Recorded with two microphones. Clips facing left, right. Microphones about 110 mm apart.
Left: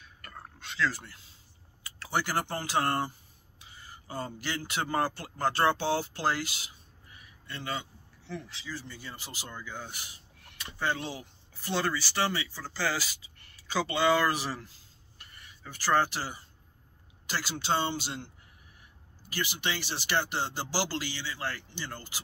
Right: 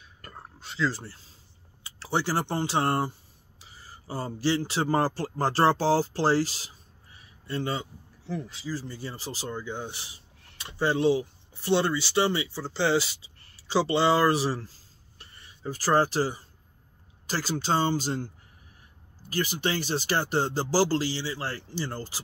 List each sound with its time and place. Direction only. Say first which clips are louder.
0.2 s roaring cats: right 1 dB; 25° right (ahead or behind)
1.8 s speech: right 3 dB; 25° right (ahead or behind)